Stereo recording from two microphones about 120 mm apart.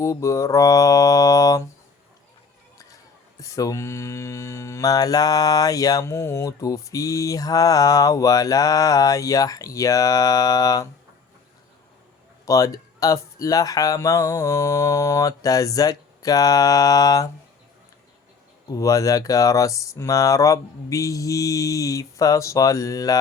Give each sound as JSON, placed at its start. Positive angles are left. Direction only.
{"t": 0.0, "sound": "mantra", "side_deg": 25}
{"t": 3.4, "sound": "mantra", "side_deg": 25}
{"t": 12.5, "sound": "mantra", "side_deg": 30}
{"t": 18.7, "sound": "mantra", "side_deg": 30}